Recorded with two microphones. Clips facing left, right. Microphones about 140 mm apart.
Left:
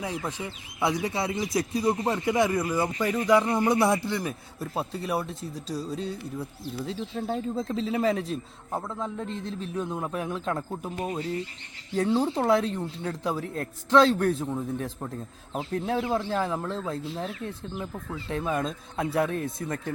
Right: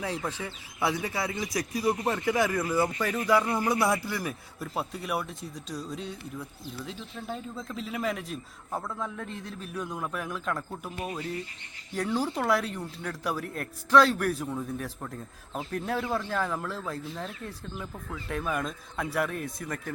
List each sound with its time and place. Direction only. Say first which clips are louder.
0.0 s speech: left 1 dB; 15° left (ahead or behind)